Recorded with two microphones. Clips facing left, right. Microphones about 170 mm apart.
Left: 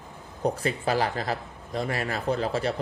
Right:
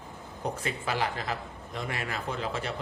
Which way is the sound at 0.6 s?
35° left (ahead or behind).